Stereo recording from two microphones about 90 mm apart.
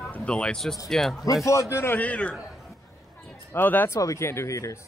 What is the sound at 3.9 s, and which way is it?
Speech, 35° left (ahead or behind).